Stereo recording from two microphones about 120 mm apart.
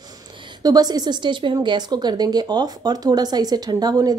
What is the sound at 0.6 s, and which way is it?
Speech, 35° right (ahead or behind).